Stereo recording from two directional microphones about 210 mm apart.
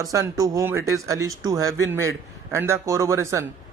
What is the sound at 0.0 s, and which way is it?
Speech, 15° right (ahead or behind).